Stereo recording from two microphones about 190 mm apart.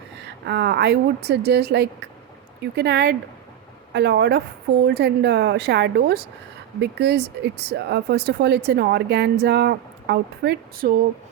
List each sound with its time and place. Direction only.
0.4 s speech: 60° right (ahead or behind)